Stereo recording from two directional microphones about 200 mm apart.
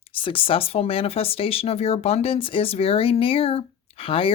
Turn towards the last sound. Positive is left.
turn(degrees=25)  # may be behind; listen again after turning